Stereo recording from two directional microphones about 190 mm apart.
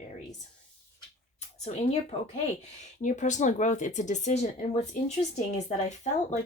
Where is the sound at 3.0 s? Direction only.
40° left (ahead or behind).